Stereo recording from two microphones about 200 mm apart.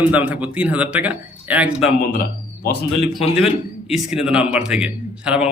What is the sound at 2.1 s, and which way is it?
Speech, 45° left (ahead or behind).